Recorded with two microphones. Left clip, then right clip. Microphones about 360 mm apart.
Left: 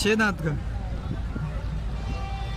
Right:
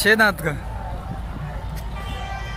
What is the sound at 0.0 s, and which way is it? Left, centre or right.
Speech, centre.